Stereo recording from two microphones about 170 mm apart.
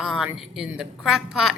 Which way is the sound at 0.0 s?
Centre (ahead or behind).